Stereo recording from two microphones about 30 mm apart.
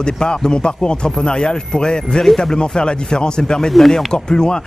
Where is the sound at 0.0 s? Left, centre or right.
Left.